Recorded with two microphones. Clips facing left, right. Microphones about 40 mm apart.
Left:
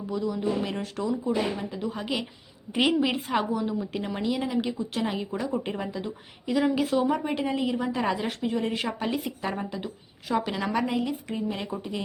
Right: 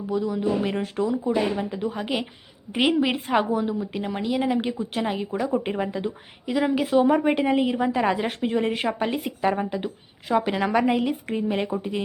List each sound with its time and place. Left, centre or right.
0.1 s a woman's voice: centre
4.4 s a woman's voice: right
6.4 s a woman's voice: centre
7.1 s a woman's voice: right
10.8 s a woman's voice: right